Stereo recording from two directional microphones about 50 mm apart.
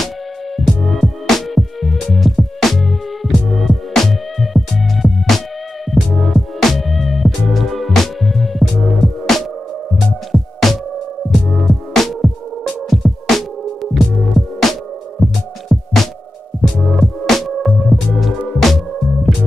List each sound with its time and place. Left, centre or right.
0.6 s music: centre